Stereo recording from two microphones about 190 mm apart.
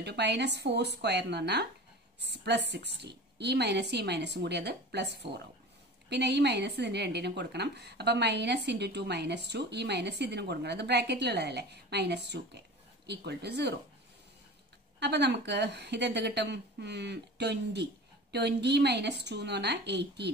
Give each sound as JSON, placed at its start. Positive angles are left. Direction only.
{"t": 0.0, "sound": "a woman's voice", "side_deg": -60}
{"t": 15.0, "sound": "a woman's voice", "side_deg": -60}